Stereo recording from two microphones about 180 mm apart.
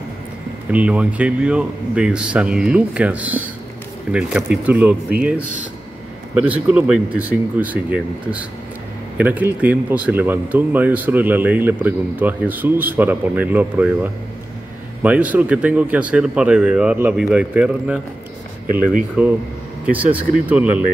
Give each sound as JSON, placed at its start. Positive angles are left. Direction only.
{"t": 0.7, "sound": "speech", "side_deg": -5}
{"t": 6.3, "sound": "speech", "side_deg": -10}
{"t": 19.2, "sound": "speech", "side_deg": -5}
{"t": 20.4, "sound": "speech", "side_deg": -10}